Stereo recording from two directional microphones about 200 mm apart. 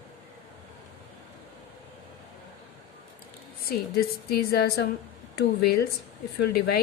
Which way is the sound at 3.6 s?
50° left (ahead or behind).